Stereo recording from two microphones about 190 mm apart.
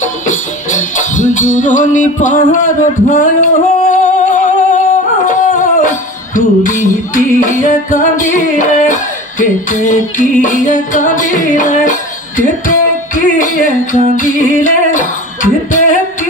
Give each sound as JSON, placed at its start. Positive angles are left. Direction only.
{"t": 0.3, "sound": "music", "side_deg": 40}
{"t": 3.9, "sound": "singing", "side_deg": 40}
{"t": 6.3, "sound": "music", "side_deg": 40}